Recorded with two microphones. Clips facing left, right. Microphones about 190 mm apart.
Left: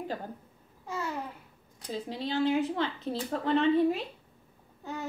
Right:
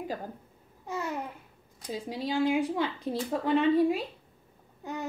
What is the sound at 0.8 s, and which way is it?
Babbling, 20° right (ahead or behind).